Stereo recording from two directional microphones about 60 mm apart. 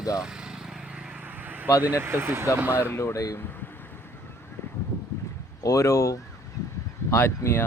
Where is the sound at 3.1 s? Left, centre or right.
Left.